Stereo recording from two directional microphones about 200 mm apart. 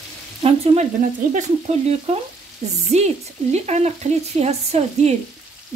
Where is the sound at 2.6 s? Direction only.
35° right (ahead or behind).